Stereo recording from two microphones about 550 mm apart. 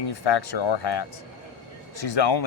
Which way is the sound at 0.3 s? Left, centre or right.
Left.